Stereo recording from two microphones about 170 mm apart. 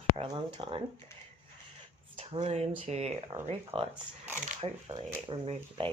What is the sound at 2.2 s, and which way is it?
Speech, 35° right (ahead or behind).